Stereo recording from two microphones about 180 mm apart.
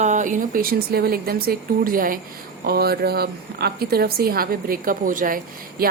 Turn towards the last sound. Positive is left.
turn(degrees=-50)  # may be behind; listen again after turning